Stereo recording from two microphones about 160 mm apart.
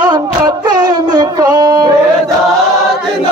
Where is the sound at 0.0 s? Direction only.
25° right (ahead or behind).